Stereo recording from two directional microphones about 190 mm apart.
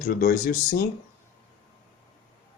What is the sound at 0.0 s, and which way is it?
Speech, 45° left (ahead or behind).